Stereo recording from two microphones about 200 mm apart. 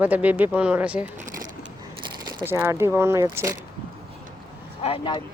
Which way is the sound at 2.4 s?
10° right (ahead or behind).